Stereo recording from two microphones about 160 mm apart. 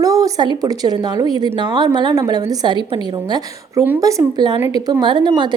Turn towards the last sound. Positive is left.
turn(degrees=-30)  # may be behind; listen again after turning